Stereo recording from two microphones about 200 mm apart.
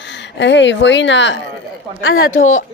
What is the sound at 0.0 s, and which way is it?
A woman's voice, 65° left (ahead or behind).